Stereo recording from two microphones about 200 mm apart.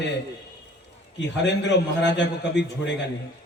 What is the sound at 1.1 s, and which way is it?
A man's voice, 65° left (ahead or behind).